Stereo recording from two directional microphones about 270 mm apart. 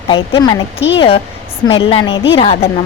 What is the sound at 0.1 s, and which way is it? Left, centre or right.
A woman's voice, centre.